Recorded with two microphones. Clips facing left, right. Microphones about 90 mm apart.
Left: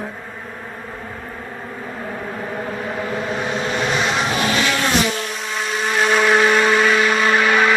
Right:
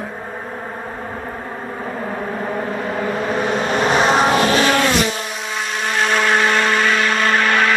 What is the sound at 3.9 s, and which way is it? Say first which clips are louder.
Vehicle: right 9 dB; 45° right (ahead or behind).